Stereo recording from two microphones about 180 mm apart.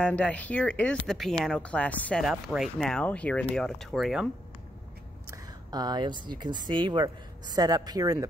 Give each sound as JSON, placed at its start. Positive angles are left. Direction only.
{"t": 0.0, "sound": "speech", "side_deg": 5}
{"t": 5.3, "sound": "speech", "side_deg": -20}